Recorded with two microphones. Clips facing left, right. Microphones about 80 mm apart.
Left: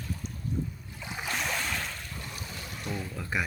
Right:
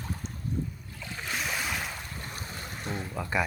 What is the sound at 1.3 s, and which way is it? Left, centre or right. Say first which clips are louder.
Boat: even; centre.